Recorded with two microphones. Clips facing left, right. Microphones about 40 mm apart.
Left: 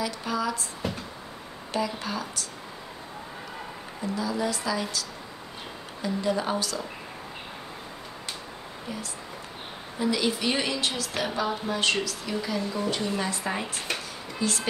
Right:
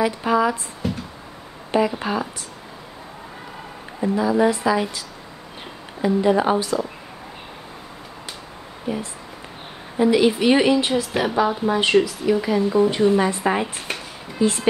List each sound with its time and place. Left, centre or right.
0.0 s speech: right
0.8 s a sound: centre
1.7 s speech: right
4.0 s speech: right
6.0 s speech: right
8.9 s speech: right